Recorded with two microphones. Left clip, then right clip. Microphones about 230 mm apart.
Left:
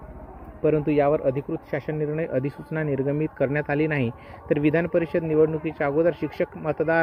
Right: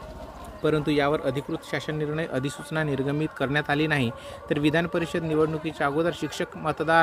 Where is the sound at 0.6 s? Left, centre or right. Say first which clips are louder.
Left 3 dB; centre.